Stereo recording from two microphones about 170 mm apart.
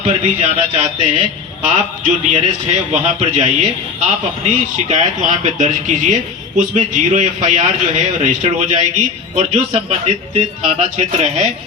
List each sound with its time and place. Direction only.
0.0 s a man's voice: 40° right (ahead or behind)